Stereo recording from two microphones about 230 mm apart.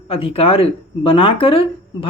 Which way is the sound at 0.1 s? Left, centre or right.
Left.